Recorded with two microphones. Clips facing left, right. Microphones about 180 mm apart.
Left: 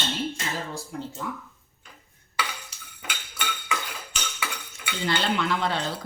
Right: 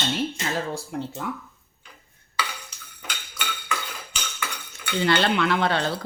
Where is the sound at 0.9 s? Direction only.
70° right (ahead or behind).